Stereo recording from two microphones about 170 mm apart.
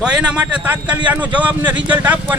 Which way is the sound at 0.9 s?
25° right (ahead or behind).